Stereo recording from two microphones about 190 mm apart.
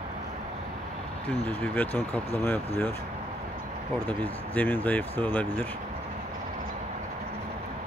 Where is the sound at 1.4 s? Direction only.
10° left (ahead or behind).